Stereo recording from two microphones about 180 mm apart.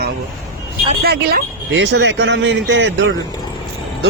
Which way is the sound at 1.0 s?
60° right (ahead or behind).